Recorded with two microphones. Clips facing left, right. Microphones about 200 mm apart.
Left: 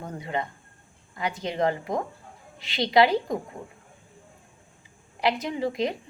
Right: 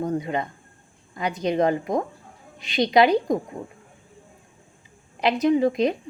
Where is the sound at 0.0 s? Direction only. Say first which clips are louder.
Right 6 dB; 20° right (ahead or behind).